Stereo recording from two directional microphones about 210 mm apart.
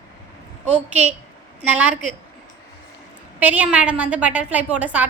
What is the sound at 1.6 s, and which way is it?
Speech, 5° right (ahead or behind).